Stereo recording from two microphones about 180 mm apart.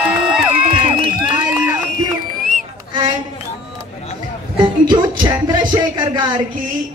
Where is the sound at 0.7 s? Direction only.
30° right (ahead or behind).